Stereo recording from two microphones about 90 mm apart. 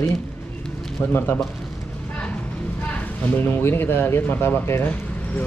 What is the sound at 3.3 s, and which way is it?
Speech, 25° left (ahead or behind).